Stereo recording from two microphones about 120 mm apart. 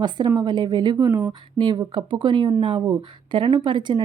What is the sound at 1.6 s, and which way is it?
Speech, 40° right (ahead or behind).